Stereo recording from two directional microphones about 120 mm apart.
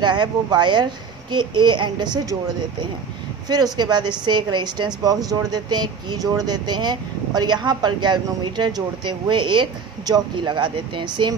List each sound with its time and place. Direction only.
0.0 s a woman's voice: 40° right (ahead or behind)
3.4 s a woman's voice: 35° right (ahead or behind)